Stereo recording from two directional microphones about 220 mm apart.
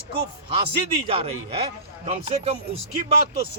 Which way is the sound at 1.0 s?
25° right (ahead or behind).